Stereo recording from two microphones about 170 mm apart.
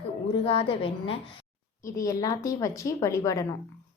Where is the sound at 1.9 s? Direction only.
20° left (ahead or behind).